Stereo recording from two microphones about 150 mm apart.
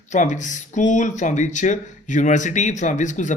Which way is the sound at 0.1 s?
55° left (ahead or behind).